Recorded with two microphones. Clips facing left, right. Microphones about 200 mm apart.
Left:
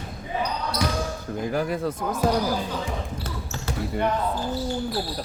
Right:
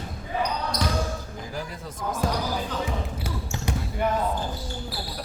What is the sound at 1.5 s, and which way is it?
Speech, 60° left (ahead or behind).